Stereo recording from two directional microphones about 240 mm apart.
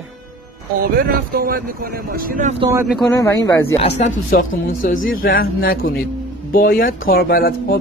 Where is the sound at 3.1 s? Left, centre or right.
Centre.